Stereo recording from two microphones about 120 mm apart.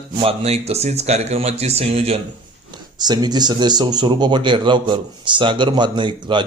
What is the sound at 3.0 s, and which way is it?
Speech, 35° right (ahead or behind).